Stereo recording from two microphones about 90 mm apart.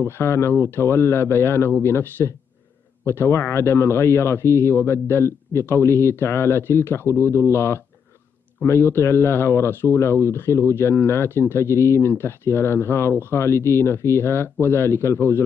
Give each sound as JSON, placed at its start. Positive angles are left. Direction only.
{"t": 0.0, "sound": "speech", "side_deg": 30}